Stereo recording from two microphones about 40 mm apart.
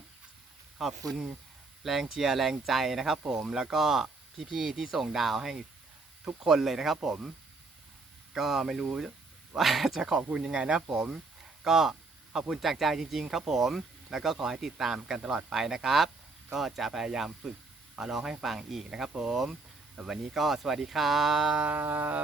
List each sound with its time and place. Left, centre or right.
0.8 s speech: centre
8.3 s speech: centre
10.0 s speech: centre
21.8 s music: right